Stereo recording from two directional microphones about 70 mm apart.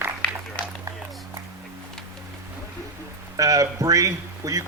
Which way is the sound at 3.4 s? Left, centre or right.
Right.